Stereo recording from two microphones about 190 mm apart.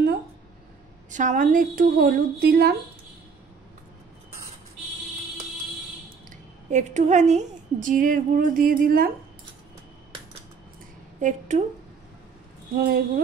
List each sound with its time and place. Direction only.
1.1 s a woman's voice: 40° right (ahead or behind); by 2.7 s 55° right (ahead or behind)
6.7 s a woman's voice: 40° right (ahead or behind)
11.1 s speech: 40° right (ahead or behind)
12.7 s a woman's voice: 55° right (ahead or behind)